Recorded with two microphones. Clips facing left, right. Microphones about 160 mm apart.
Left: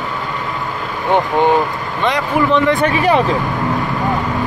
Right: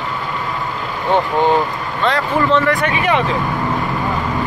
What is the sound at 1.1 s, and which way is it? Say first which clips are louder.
Vehicle: left 1 dB; 15° left (ahead or behind).